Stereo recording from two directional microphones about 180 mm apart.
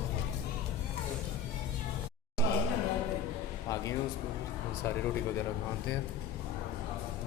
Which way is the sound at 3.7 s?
20° left (ahead or behind).